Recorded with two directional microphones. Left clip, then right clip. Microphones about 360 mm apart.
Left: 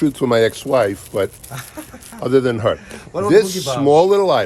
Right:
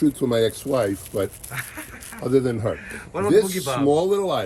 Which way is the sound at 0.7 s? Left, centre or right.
Centre.